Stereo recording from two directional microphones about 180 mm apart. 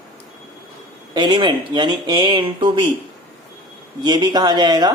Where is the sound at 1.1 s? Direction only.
25° right (ahead or behind).